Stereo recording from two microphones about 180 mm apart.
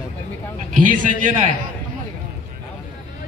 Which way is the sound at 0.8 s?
45° right (ahead or behind).